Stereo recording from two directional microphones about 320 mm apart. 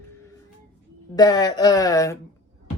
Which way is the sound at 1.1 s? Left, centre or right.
Centre.